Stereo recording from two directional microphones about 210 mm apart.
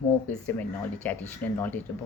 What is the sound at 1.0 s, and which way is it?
Speech, 10° left (ahead or behind).